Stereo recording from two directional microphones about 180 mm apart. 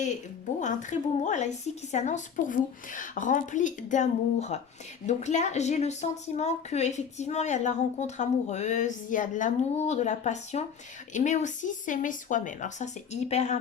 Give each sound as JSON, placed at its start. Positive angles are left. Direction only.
{"t": 0.6, "sound": "a woman's voice", "side_deg": 45}